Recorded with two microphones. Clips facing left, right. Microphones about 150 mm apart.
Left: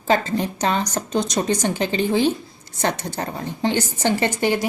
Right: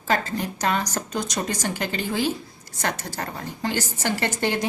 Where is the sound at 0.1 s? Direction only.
20° left (ahead or behind).